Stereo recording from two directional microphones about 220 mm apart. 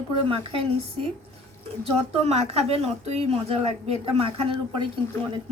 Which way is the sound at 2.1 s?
30° right (ahead or behind).